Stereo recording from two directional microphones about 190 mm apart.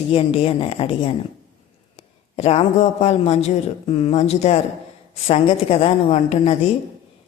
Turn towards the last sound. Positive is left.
turn(degrees=35)  # may be behind; listen again after turning